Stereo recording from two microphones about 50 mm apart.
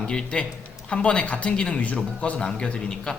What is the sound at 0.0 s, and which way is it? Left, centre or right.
A man's voice, centre.